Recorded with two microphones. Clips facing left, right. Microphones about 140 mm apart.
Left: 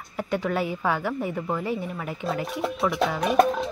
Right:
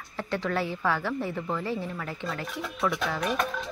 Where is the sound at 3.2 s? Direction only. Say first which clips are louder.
Left 12 dB; 45° left (ahead or behind).